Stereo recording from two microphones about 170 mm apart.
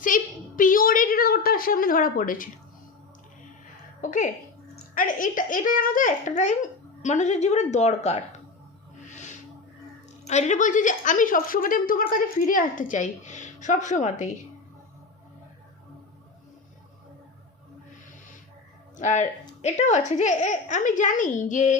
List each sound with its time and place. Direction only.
0.0 s a sound: 50° left (ahead or behind)
4.0 s speech: 50° left (ahead or behind)
9.0 s music: 45° left (ahead or behind)
10.2 s speech: 40° left (ahead or behind)
18.9 s speech: 45° left (ahead or behind)